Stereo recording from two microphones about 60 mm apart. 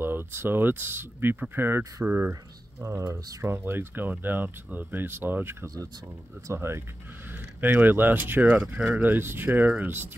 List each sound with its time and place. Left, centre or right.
0.0 s speech: right
7.2 s speech: right
8.7 s speech: centre
9.0 s speech: right